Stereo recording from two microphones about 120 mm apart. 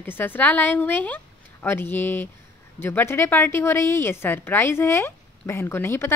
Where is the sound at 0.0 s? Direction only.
15° left (ahead or behind).